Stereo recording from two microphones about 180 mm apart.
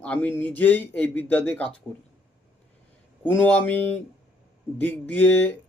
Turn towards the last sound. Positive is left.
turn(degrees=10)  # may be behind; listen again after turning